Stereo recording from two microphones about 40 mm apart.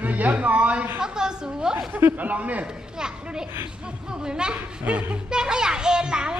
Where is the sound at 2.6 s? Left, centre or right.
Right.